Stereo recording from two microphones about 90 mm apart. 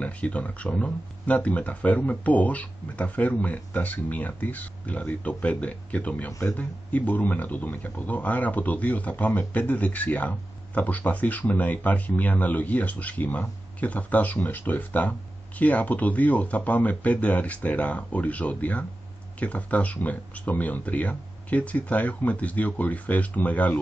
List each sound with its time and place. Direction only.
0.0 s speech: 15° left (ahead or behind)